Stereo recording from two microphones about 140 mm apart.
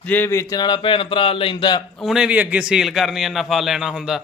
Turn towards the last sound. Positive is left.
turn(degrees=-5)  # may be behind; listen again after turning